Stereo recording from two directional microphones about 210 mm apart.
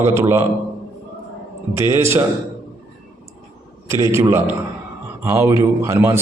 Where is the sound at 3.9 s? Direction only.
15° right (ahead or behind).